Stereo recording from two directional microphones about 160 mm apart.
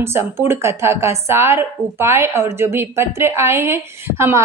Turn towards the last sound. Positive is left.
turn(degrees=-15)  # may be behind; listen again after turning